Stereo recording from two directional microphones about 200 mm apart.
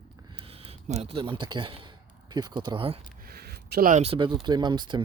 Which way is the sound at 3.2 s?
50° right (ahead or behind).